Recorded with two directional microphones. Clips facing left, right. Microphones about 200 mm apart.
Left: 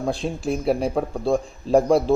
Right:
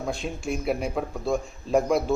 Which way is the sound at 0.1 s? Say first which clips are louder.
Left 4 dB; 35° left (ahead or behind).